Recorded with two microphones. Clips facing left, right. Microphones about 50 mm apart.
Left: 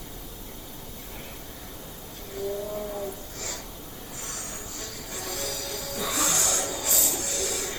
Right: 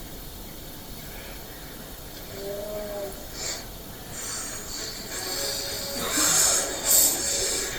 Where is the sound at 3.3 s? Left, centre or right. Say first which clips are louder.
Even; left.